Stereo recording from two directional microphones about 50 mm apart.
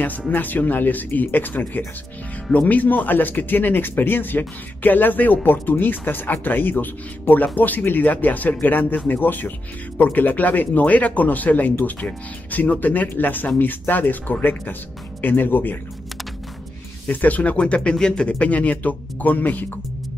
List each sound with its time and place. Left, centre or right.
0.3 s speech: left
17.1 s speech: left